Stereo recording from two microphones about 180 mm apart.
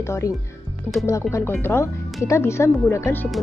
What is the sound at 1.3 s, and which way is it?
Speech, 15° left (ahead or behind).